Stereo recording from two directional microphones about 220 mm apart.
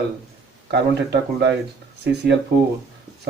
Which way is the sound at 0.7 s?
50° right (ahead or behind).